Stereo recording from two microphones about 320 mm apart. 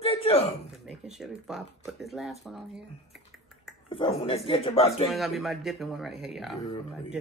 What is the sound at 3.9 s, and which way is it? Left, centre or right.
Speech, centre.